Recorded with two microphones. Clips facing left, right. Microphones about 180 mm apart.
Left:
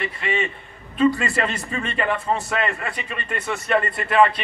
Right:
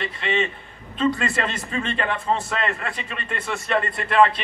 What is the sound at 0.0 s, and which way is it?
Speech, 5° left (ahead or behind).